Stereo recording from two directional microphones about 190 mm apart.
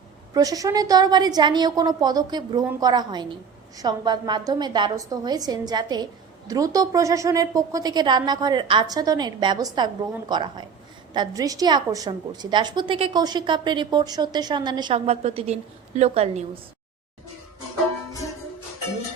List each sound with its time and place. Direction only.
0.3 s a woman's voice: 20° right (ahead or behind); by 16.5 s 35° right (ahead or behind)